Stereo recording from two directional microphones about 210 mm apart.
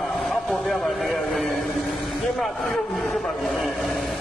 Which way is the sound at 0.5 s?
Centre (ahead or behind).